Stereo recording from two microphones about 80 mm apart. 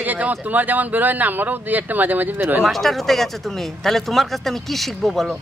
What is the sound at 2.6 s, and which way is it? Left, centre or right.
Speech, centre.